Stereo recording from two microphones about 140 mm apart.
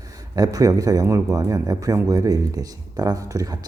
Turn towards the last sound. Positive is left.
turn(degrees=-25)  # may be behind; listen again after turning